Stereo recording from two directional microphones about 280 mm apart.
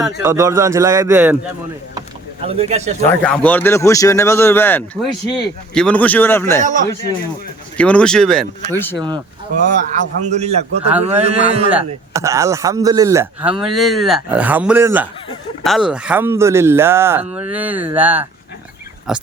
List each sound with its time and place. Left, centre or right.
0.0 s a man's voice: centre
2.0 s rowboat: right
3.1 s speech: centre
6.6 s a man's voice: right
7.8 s speech: centre
9.0 s a man's voice: centre
12.1 s a man's voice: centre